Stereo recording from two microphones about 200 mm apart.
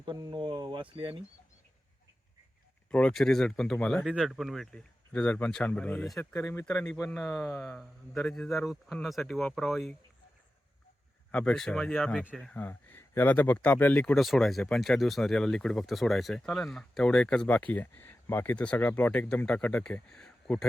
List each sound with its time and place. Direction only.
0.0 s speech: 25° right (ahead or behind)
2.9 s speech: 5° left (ahead or behind)
11.3 s speech: 5° left (ahead or behind)